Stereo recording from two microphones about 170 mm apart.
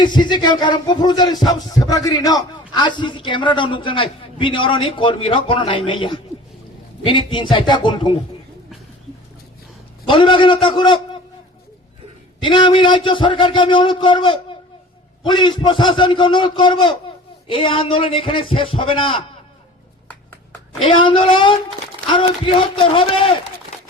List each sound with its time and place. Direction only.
0.0 s rapping: 25° left (ahead or behind)
10.1 s rapping: 30° left (ahead or behind)
12.4 s rapping: 30° left (ahead or behind)
17.5 s a man's voice: 30° left (ahead or behind)
20.8 s a man's voice: 30° left (ahead or behind)
22.7 s a man's voice: 30° left (ahead or behind)